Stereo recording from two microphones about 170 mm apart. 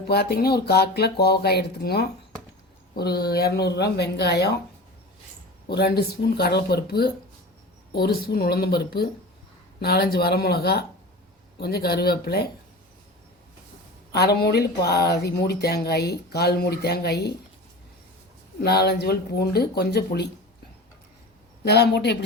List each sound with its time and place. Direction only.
0.1 s speech: 70° left (ahead or behind)
3.6 s speech: 80° left
5.6 s speech: 70° left (ahead or behind)
14.1 s speech: 70° left (ahead or behind)
18.6 s speech: 70° left (ahead or behind)
21.6 s speech: 75° left (ahead or behind)